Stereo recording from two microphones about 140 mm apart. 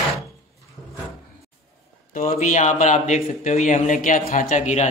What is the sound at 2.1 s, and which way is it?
Speech, 60° left (ahead or behind).